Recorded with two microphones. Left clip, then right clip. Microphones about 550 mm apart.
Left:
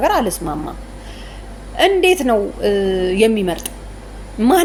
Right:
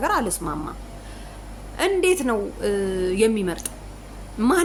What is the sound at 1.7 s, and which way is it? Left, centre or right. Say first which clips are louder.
A woman's voice: left 7 dB; right.